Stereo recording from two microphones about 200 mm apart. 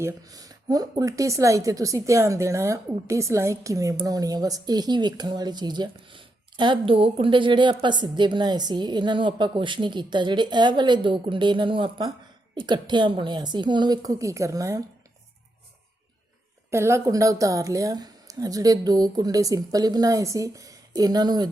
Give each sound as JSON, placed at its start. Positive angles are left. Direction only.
{"t": 0.0, "sound": "speech", "side_deg": -20}
{"t": 16.7, "sound": "a woman's voice", "side_deg": -15}